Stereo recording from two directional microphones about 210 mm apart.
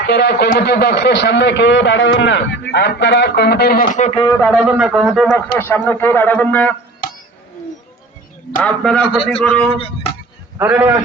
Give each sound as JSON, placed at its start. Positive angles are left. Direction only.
{"t": 0.1, "sound": "a man's voice", "side_deg": 55}
{"t": 4.4, "sound": "speech", "side_deg": 0}
{"t": 8.6, "sound": "a man's voice", "side_deg": 5}
{"t": 9.7, "sound": "speech", "side_deg": 25}
{"t": 10.6, "sound": "a man's voice", "side_deg": -10}